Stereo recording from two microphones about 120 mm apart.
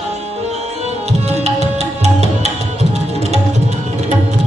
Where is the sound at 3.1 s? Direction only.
65° right (ahead or behind).